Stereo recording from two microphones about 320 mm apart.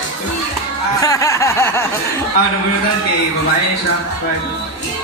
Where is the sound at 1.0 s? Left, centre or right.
Centre.